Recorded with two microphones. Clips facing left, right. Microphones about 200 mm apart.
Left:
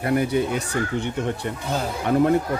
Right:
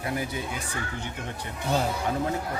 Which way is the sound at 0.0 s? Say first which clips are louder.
Left 10 dB; 60° left (ahead or behind).